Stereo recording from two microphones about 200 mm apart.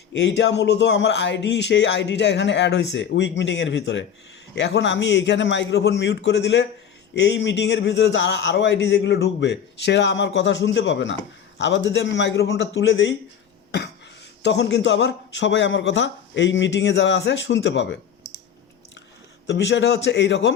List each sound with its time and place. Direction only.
0.1 s speech: 60° left (ahead or behind)
14.4 s speech: 60° left (ahead or behind)
19.5 s speech: 60° left (ahead or behind)